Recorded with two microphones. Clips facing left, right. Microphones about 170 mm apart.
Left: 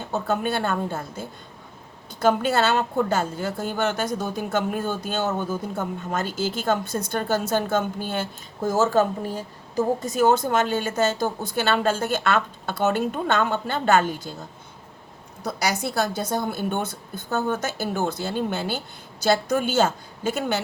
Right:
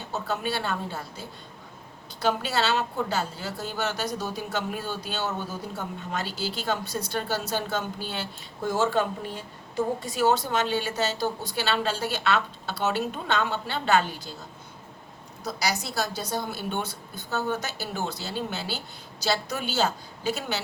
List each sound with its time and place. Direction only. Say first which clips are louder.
0.1 s a woman's voice: left 5 dB; 50° left (ahead or behind)
15.4 s a woman's voice: left 4 dB; 55° left (ahead or behind)